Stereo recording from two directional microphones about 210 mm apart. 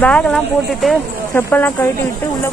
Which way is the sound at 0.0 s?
5° left (ahead or behind).